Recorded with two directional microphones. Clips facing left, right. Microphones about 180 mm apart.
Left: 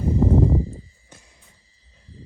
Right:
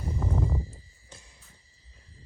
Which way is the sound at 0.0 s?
35° left (ahead or behind).